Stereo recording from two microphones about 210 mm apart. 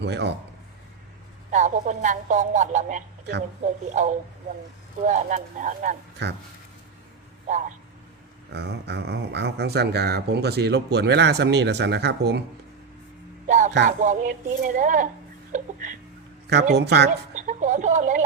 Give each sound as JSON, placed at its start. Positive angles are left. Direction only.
{"t": 0.0, "sound": "speech", "side_deg": -55}
{"t": 1.5, "sound": "speech", "side_deg": -35}
{"t": 6.2, "sound": "speech", "side_deg": -55}
{"t": 8.5, "sound": "speech", "side_deg": -55}
{"t": 13.5, "sound": "music", "side_deg": -35}
{"t": 13.8, "sound": "speech", "side_deg": -35}
{"t": 16.7, "sound": "speech", "side_deg": -55}
{"t": 17.3, "sound": "speech", "side_deg": -35}